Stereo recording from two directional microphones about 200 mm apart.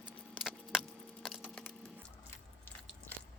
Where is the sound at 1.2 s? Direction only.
5° left (ahead or behind).